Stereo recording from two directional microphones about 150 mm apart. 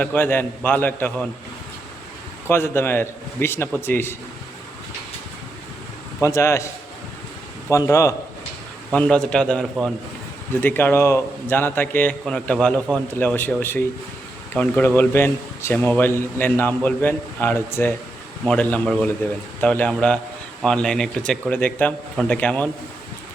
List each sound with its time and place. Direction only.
0.0 s speech: 10° left (ahead or behind)
2.5 s speech: 15° left (ahead or behind)
6.2 s a man's voice: 20° left (ahead or behind)
7.7 s a man's voice: 20° left (ahead or behind)
8.9 s speech: 5° left (ahead or behind)